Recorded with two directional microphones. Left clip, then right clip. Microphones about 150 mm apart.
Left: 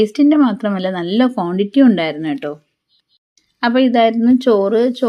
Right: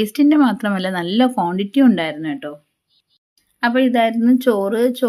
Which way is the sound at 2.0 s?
5° left (ahead or behind).